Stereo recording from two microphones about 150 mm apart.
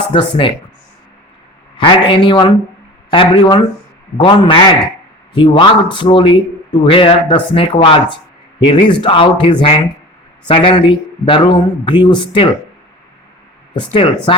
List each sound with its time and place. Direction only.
0.1 s a man's voice: 35° left (ahead or behind)
1.7 s a man's voice: 30° left (ahead or behind)
13.9 s a man's voice: 35° left (ahead or behind)